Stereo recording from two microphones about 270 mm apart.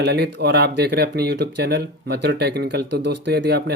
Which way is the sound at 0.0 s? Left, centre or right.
Right.